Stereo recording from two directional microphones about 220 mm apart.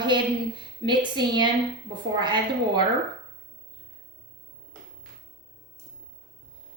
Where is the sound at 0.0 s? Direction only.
20° right (ahead or behind).